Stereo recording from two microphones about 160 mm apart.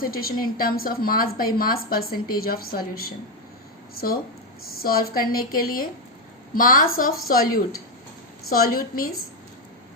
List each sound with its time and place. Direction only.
0.0 s a woman's voice: 65° left (ahead or behind)